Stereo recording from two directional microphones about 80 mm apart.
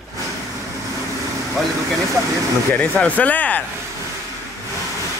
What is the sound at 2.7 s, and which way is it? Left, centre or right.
Speech, centre.